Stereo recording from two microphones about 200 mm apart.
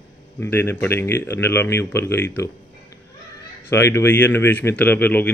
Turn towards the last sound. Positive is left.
turn(degrees=10)  # may be behind; listen again after turning